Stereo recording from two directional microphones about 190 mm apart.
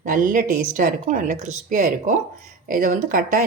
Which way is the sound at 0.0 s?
45° right (ahead or behind).